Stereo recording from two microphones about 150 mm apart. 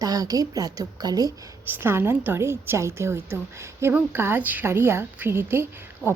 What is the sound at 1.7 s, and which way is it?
Speech, 15° right (ahead or behind).